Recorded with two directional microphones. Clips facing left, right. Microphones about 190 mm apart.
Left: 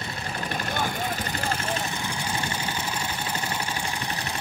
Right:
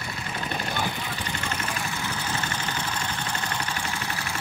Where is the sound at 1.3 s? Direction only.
35° left (ahead or behind).